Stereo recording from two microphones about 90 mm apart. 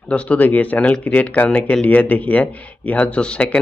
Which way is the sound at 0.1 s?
15° left (ahead or behind).